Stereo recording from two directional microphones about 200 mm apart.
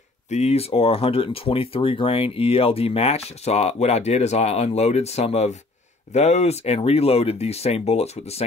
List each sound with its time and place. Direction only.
0.3 s speech: 30° left (ahead or behind)